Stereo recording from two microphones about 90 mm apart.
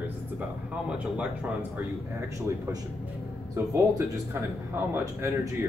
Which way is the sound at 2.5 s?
35° right (ahead or behind).